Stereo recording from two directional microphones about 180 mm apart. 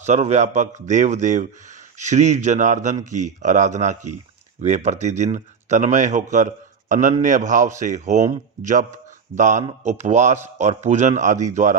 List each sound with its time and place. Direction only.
0.0 s speech: 40° right (ahead or behind)